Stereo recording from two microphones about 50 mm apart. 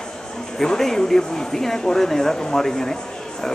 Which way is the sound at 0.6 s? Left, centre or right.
Centre.